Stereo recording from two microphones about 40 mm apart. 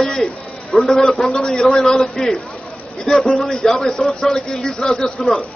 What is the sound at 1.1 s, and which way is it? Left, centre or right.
A man's voice, centre.